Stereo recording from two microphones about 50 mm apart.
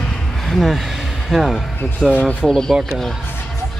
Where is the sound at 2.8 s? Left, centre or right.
Centre.